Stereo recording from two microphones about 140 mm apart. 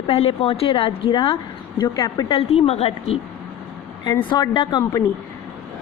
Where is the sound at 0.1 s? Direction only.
45° left (ahead or behind).